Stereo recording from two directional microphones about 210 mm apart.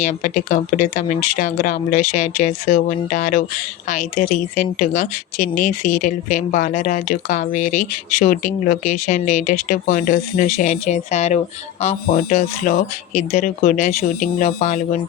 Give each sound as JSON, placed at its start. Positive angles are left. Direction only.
{"t": 0.0, "sound": "speech", "side_deg": 35}